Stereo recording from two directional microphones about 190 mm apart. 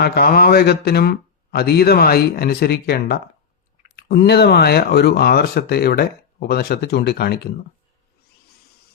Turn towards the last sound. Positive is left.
turn(degrees=55)  # may be behind; listen again after turning